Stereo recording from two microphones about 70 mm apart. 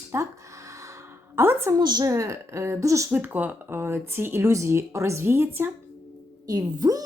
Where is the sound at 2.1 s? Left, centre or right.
Right.